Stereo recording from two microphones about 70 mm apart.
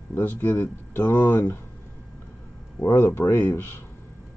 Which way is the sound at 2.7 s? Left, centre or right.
Left.